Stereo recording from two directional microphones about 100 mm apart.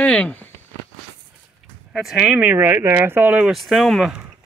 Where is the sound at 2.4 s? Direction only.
20° right (ahead or behind).